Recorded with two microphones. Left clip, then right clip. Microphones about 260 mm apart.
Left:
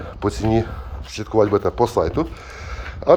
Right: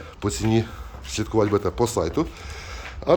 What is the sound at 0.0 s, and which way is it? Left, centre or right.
Speech, centre.